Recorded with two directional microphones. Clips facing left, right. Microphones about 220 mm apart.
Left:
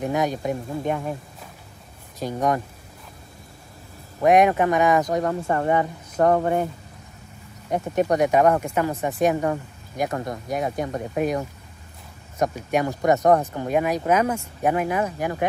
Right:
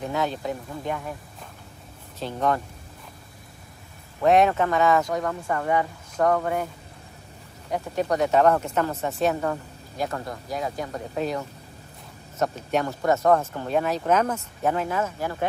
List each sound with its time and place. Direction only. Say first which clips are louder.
0.0 s speech: left 4 dB; 15° left (ahead or behind)
2.1 s speech: left 2 dB; 15° left (ahead or behind)
4.2 s speech: left 2 dB; 15° left (ahead or behind)
5.3 s speech: left 3 dB; 30° left (ahead or behind)
7.7 s speech: left 4 dB; 20° left (ahead or behind)